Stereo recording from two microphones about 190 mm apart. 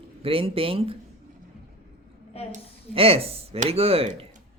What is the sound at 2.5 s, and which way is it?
Speech, 30° right (ahead or behind).